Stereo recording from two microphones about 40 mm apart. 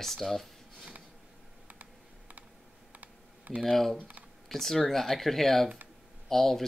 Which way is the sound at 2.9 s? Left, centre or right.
Right.